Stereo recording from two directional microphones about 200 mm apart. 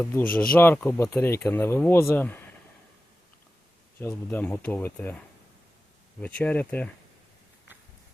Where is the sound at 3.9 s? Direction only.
10° left (ahead or behind).